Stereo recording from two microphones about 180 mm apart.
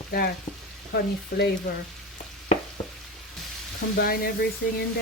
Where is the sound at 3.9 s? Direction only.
60° left (ahead or behind).